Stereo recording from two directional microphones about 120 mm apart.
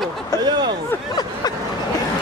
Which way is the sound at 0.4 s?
35° right (ahead or behind).